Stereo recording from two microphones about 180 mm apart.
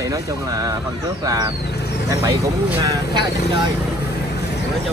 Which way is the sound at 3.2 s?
65° left (ahead or behind).